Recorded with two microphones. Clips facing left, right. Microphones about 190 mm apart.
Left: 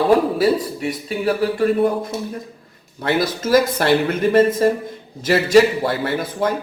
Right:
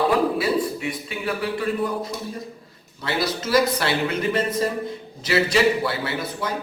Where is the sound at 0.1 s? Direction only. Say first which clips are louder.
Left 5 dB; 40° left (ahead or behind).